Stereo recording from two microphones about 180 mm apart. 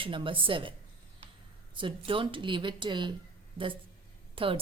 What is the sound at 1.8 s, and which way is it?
A woman's voice, 30° right (ahead or behind).